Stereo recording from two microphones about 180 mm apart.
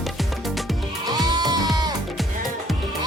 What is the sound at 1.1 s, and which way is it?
Music, 20° right (ahead or behind).